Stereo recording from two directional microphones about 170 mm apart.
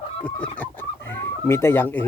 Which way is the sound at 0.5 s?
10° left (ahead or behind).